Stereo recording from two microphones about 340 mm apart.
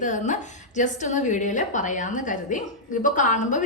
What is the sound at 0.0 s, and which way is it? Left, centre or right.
A woman's voice, left.